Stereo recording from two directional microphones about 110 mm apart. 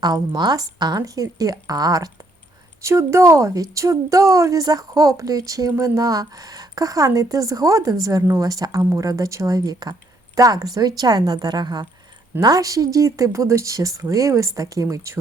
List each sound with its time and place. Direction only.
0.0 s a woman's voice: 40° right (ahead or behind)